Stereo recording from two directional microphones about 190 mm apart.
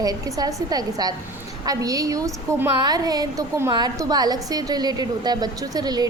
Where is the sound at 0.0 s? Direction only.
20° right (ahead or behind).